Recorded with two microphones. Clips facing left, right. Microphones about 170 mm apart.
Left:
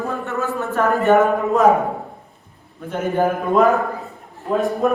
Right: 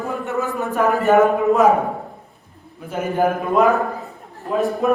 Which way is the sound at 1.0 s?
Centre (ahead or behind).